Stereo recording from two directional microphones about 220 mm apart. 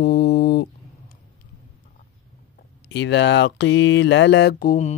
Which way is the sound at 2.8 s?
50° left (ahead or behind).